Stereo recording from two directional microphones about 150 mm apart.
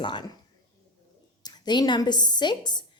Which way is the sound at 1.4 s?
30° left (ahead or behind).